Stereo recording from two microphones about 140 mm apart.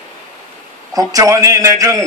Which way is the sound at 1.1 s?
25° right (ahead or behind).